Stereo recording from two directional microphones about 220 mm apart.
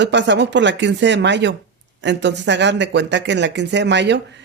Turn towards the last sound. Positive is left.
turn(degrees=-55)  # may be behind; listen again after turning